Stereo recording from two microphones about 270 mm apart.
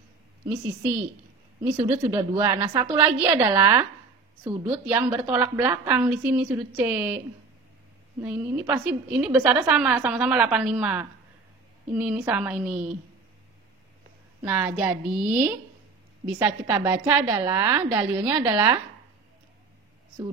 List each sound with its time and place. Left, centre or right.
0.5 s a woman's voice: centre
8.2 s a woman's voice: centre
14.4 s a woman's voice: centre